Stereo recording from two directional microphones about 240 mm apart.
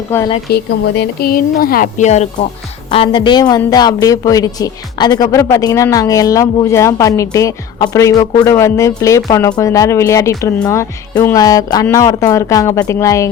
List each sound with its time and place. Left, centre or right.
0.5 s speech: left; by 13.2 s centre